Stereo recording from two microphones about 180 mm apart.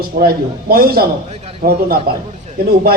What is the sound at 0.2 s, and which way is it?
Speech, 55° right (ahead or behind).